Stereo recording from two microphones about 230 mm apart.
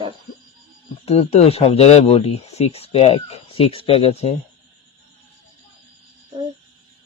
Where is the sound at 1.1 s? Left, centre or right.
Left.